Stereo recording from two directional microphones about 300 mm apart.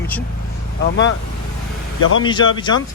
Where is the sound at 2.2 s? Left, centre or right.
Centre.